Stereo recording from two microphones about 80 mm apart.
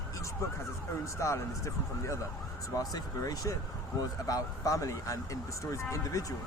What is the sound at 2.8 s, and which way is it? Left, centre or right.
Speech, left.